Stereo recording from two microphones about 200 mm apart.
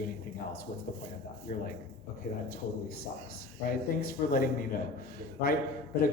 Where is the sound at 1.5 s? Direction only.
40° left (ahead or behind).